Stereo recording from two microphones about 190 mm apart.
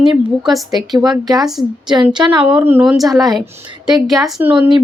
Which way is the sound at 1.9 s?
25° right (ahead or behind).